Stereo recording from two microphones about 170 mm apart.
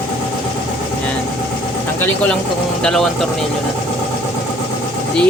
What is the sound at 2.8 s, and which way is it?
Speech, centre (ahead or behind).